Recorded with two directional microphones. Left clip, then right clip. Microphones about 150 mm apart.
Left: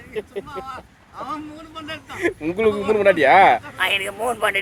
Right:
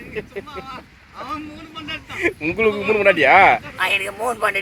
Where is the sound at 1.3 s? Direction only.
40° left (ahead or behind).